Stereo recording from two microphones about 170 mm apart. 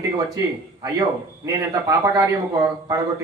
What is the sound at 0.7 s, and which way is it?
A man's voice, 20° right (ahead or behind).